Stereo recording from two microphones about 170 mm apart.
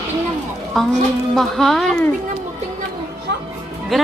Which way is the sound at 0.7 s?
Centre (ahead or behind).